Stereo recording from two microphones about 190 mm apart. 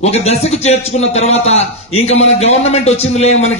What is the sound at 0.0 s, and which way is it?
A man's voice, 35° left (ahead or behind).